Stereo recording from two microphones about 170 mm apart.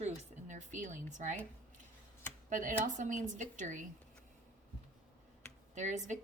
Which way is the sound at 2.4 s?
50° right (ahead or behind).